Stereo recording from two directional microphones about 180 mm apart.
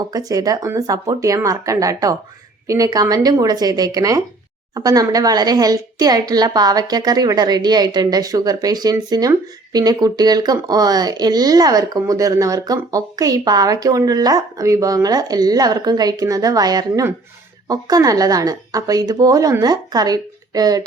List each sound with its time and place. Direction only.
0.0 s speech: 20° right (ahead or behind)